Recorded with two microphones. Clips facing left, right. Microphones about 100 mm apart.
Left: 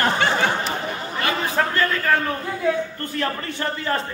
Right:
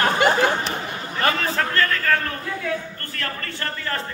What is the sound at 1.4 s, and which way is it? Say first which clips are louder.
A man's voice: left 1 dB; 15° left (ahead or behind).